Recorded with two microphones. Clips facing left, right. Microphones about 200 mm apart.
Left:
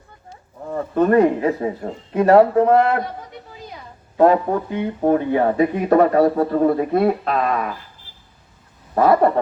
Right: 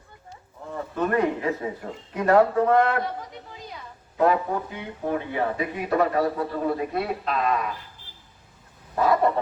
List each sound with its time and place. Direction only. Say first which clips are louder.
0.7 s speech: left 9 dB; 45° left (ahead or behind); by 3.0 s 30° left (ahead or behind)
4.2 s speech: left 7 dB; 40° left (ahead or behind)
9.0 s dog: left 6 dB; 55° left (ahead or behind)